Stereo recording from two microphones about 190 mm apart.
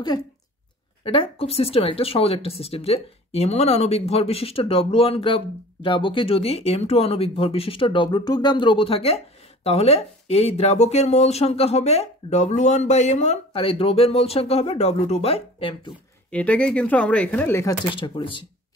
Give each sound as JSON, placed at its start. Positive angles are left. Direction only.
{"t": 1.0, "sound": "speech", "side_deg": 30}
{"t": 16.3, "sound": "speech", "side_deg": 5}
{"t": 17.9, "sound": "speech", "side_deg": 25}